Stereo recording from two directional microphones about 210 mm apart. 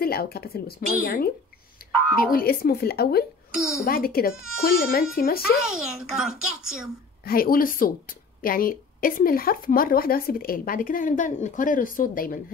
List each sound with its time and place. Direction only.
0.0 s a woman's voice: 45° left (ahead or behind)
1.8 s music: 45° left (ahead or behind)
2.3 s a woman's voice: 45° left (ahead or behind)
3.5 s a child's voice: centre (ahead or behind)
3.8 s a woman's voice: 45° left (ahead or behind)
5.6 s a child's voice: 5° right (ahead or behind)
7.2 s a woman's voice: 45° left (ahead or behind)